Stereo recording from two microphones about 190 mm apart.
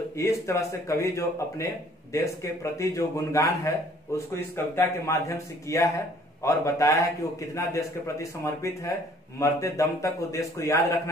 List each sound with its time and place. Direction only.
0.1 s a man's voice: 15° left (ahead or behind)
4.7 s a man's voice: 15° left (ahead or behind)